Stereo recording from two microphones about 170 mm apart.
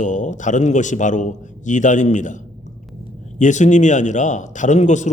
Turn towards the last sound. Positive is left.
turn(degrees=45)  # may be behind; listen again after turning